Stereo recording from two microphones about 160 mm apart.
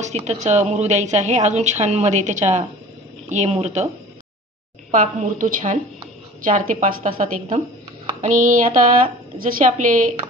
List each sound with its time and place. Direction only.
0.0 s a woman's voice: 45° right (ahead or behind)
4.9 s a woman's voice: 55° right (ahead or behind)